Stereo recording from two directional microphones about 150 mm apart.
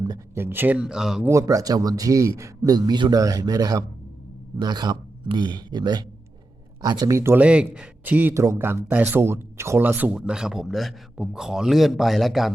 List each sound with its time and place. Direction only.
0.3 s speech: 15° right (ahead or behind)
1.3 s a man's voice: 20° right (ahead or behind); by 12.5 s centre (ahead or behind)